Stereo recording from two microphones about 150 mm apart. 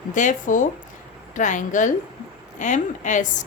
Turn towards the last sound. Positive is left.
turn(degrees=55)  # may be behind; listen again after turning